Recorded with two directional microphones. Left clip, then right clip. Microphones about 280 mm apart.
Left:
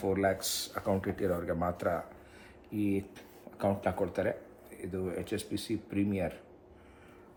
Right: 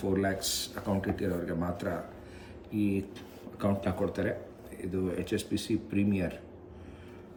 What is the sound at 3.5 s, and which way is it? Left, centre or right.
Speech, centre.